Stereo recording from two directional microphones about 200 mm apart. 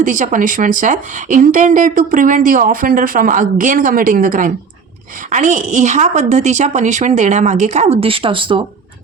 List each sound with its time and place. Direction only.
0.0 s speech: 40° right (ahead or behind)